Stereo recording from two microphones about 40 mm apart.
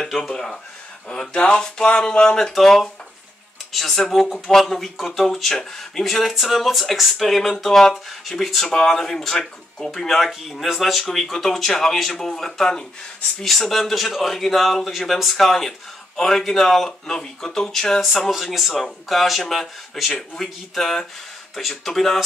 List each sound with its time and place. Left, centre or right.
0.0 s a sound: centre
0.3 s speech: centre
3.9 s speech: centre
6.4 s speech: centre
18.3 s speech: centre